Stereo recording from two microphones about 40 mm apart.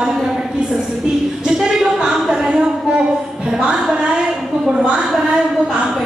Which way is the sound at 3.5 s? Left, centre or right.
Centre.